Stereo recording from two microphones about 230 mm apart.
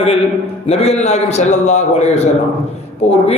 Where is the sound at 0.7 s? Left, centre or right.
Left.